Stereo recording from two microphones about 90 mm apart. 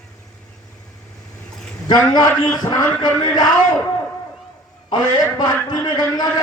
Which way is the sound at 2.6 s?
45° left (ahead or behind).